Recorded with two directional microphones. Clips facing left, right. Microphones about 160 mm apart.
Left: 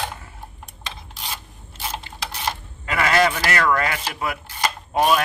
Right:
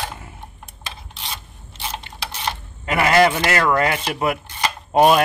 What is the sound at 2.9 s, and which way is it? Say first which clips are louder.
Speech: right 4 dB; 20° right (ahead or behind).